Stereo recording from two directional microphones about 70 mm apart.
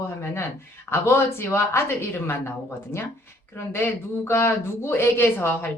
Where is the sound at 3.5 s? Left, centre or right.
Left.